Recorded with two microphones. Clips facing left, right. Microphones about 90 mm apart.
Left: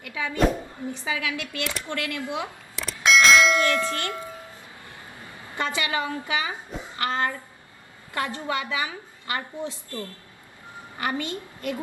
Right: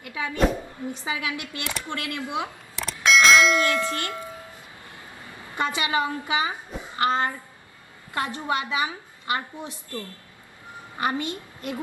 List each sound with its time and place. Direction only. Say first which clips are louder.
0.0 s a woman's voice: left 1 dB; 25° right (ahead or behind)
2.7 s bell: even; centre (ahead or behind)
3.7 s tubular bells: even; 20° right (ahead or behind)
5.5 s a woman's voice: right 2 dB; 20° right (ahead or behind)
10.9 s a woman's voice: right 2 dB; 20° right (ahead or behind)